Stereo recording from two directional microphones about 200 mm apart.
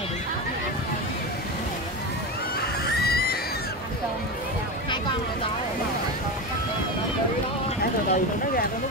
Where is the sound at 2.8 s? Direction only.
50° left (ahead or behind).